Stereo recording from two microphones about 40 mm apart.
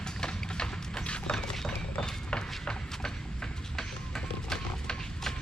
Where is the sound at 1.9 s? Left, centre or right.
Left.